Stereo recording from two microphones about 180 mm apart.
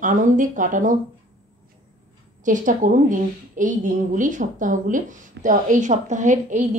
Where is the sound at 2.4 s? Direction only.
45° right (ahead or behind).